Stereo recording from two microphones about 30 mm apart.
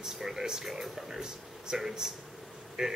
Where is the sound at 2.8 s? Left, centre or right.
Right.